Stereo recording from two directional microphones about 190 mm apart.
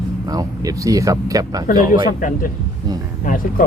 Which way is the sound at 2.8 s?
20° right (ahead or behind).